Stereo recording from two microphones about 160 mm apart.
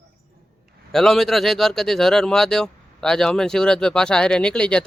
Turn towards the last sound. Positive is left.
turn(degrees=5)  # may be behind; listen again after turning